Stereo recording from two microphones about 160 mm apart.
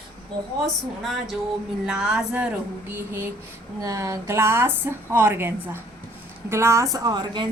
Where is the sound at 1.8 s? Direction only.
5° right (ahead or behind).